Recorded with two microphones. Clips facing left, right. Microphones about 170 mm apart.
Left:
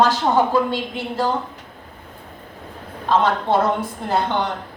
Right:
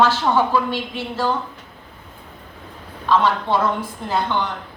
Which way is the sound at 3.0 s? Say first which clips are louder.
Even; 50° left (ahead or behind).